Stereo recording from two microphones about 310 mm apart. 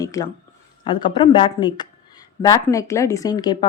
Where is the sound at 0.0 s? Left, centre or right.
Centre.